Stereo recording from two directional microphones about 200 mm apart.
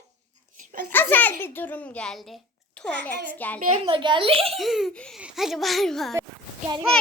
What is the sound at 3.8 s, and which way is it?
Speech, 25° right (ahead or behind).